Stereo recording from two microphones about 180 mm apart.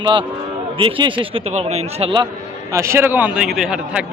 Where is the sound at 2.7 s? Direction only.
15° right (ahead or behind).